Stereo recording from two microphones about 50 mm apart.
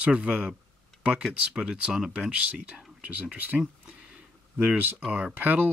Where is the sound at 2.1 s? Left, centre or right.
Right.